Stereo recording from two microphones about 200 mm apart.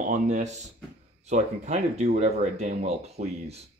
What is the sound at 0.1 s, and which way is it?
Speech, 35° right (ahead or behind).